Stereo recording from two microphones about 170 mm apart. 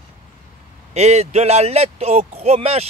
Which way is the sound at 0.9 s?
40° right (ahead or behind).